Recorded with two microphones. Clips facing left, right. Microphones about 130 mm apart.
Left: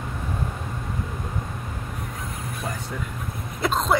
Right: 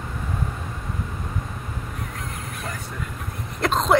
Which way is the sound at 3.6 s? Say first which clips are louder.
Right 3 dB; 5° left (ahead or behind).